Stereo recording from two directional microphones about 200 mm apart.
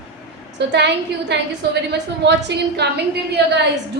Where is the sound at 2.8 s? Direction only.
55° right (ahead or behind).